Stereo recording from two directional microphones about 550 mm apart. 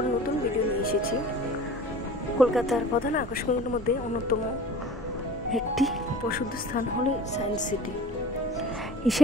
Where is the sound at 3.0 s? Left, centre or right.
Centre.